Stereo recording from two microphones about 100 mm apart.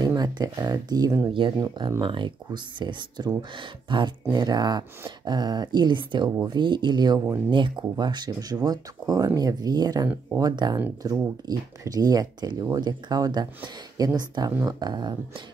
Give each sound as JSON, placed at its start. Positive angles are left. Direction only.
{"t": 0.0, "sound": "speech", "side_deg": -40}